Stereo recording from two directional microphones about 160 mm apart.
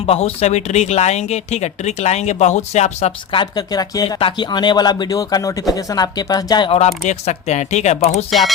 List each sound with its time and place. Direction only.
0.0 s speech: 40° left (ahead or behind)
3.3 s speech: 25° left (ahead or behind)
6.7 s speech: 45° left (ahead or behind)
8.3 s speech: centre (ahead or behind)